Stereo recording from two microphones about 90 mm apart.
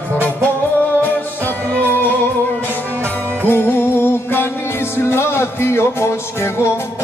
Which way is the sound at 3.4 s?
25° left (ahead or behind).